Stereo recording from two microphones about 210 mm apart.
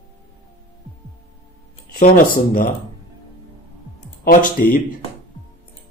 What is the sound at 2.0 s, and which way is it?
Speech, 40° left (ahead or behind).